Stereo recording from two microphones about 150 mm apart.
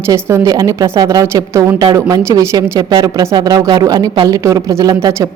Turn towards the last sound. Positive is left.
turn(degrees=-20)  # may be behind; listen again after turning